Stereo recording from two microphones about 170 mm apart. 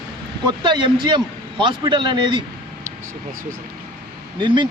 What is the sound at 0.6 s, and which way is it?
A man's voice, 30° right (ahead or behind).